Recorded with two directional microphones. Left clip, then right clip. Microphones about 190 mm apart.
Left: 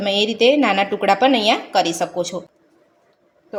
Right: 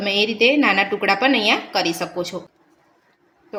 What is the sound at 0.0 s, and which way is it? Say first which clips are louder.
Speech: left 1 dB; 30° left (ahead or behind).